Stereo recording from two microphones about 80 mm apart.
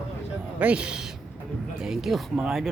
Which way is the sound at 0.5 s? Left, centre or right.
Centre.